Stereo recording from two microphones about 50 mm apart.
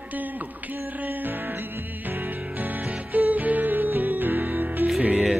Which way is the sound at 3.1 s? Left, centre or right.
Right.